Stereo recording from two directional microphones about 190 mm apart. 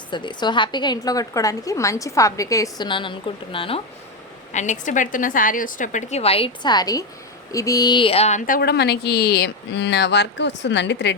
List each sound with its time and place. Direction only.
0.1 s a woman's voice: 25° left (ahead or behind)
4.5 s a woman's voice: 40° left (ahead or behind); by 11.1 s 70° left (ahead or behind)